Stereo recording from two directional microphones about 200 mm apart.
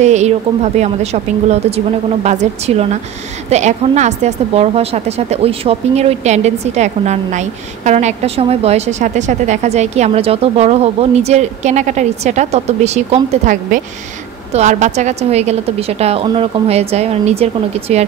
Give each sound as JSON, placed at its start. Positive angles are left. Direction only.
{"t": 0.0, "sound": "a woman's voice", "side_deg": -35}